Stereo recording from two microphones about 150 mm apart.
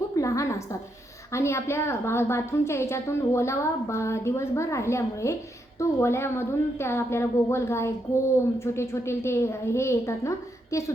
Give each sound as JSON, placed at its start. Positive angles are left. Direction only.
{"t": 0.2, "sound": "a woman's voice", "side_deg": 20}